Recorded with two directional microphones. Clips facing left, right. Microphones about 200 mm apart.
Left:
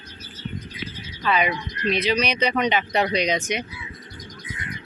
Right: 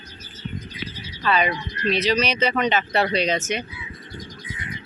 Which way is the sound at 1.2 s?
10° left (ahead or behind).